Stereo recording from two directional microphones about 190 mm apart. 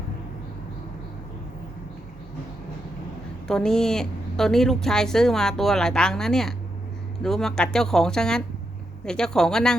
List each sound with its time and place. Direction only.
3.4 s a woman's voice: 5° left (ahead or behind)